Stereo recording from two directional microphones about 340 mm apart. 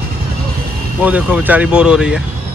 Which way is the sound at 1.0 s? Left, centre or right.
Centre.